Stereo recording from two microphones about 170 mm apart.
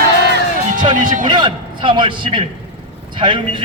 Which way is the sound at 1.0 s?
50° right (ahead or behind).